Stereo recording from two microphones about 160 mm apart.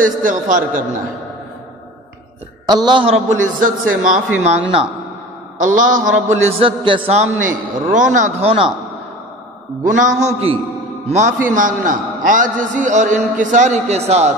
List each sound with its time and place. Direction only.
0.0 s a man's voice: 55° right (ahead or behind)
2.6 s a man's voice: 25° right (ahead or behind)
3.6 s a man's voice: 55° right (ahead or behind)
4.4 s a man's voice: 40° right (ahead or behind)
5.6 s a man's voice: 55° right (ahead or behind)
6.5 s a man's voice: 35° right (ahead or behind)
10.0 s a man's voice: 40° right (ahead or behind)